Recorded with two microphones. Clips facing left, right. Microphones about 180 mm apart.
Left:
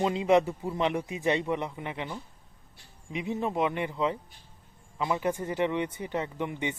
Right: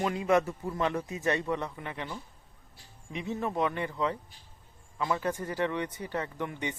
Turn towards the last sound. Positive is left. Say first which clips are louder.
# left 3 dB
turn(degrees=20)  # may be behind; listen again after turning